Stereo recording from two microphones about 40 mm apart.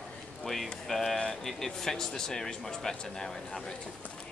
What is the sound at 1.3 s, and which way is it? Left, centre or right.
Speech, centre.